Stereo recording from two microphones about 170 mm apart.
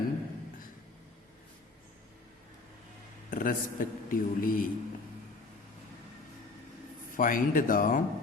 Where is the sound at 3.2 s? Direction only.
55° left (ahead or behind).